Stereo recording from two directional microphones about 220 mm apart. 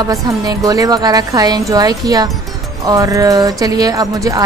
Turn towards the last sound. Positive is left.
turn(degrees=-15)  # may be behind; listen again after turning